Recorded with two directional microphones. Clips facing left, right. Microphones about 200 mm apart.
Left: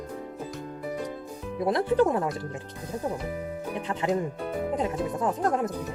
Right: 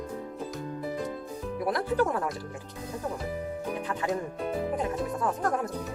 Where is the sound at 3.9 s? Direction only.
20° left (ahead or behind).